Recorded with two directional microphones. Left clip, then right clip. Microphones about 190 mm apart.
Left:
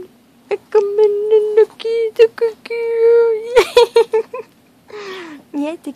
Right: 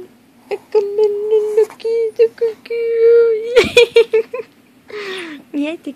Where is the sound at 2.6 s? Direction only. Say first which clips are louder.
Right 3 dB; 15° left (ahead or behind).